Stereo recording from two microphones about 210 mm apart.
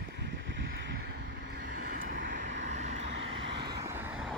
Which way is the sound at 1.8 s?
40° right (ahead or behind).